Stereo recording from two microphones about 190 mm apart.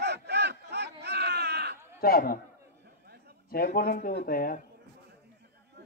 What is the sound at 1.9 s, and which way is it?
Speech, 50° left (ahead or behind).